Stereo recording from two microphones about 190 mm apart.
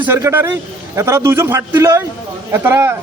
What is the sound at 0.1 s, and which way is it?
Speech, 15° right (ahead or behind).